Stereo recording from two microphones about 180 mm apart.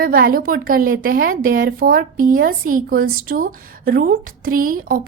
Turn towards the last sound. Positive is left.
turn(degrees=-50)  # may be behind; listen again after turning